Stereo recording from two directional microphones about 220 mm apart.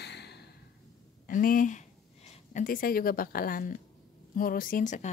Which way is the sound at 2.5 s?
40° left (ahead or behind).